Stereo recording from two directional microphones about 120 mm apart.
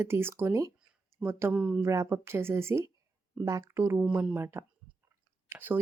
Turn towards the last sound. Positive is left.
turn(degrees=-15)  # may be behind; listen again after turning